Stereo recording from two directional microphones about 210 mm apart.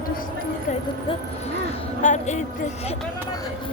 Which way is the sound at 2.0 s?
35° left (ahead or behind).